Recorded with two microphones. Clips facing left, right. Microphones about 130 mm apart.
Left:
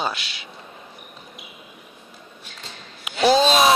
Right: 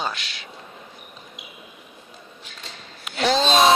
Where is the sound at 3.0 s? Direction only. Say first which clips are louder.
Left 4 dB; 10° left (ahead or behind).